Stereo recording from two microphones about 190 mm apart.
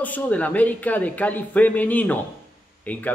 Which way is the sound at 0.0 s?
10° left (ahead or behind).